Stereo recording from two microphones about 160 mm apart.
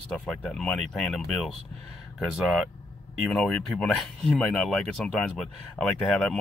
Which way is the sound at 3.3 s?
5° left (ahead or behind).